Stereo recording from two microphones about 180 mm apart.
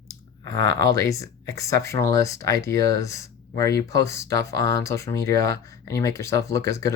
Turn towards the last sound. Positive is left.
turn(degrees=15)  # may be behind; listen again after turning